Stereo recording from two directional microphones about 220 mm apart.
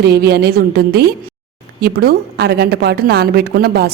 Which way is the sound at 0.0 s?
45° right (ahead or behind).